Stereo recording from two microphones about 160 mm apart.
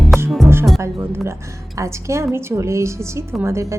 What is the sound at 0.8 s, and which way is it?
A woman's voice, 15° right (ahead or behind).